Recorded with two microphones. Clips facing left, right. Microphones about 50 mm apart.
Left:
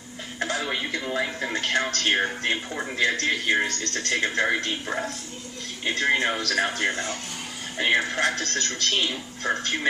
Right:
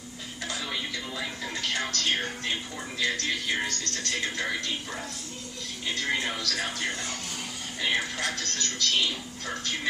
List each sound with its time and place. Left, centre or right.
0.3 s speech: left